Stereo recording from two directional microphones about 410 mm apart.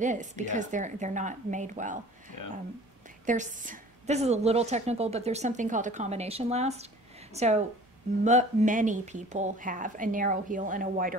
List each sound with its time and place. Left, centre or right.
0.0 s a woman's voice: centre
2.3 s speech: left
3.3 s a woman's voice: centre